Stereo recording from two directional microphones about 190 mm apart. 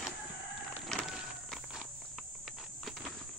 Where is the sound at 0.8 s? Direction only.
Centre (ahead or behind).